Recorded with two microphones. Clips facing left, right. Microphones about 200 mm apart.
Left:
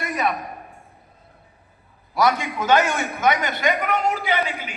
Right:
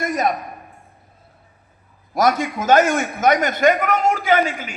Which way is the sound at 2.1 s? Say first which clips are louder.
Right 2 dB; 45° right (ahead or behind).